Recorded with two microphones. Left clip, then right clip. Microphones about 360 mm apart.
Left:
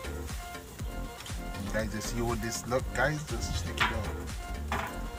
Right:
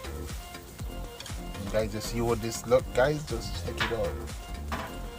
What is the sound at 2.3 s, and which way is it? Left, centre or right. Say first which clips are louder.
Speech: right 8 dB; right.